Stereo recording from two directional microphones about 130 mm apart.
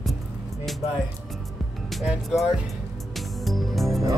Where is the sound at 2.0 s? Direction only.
5° right (ahead or behind).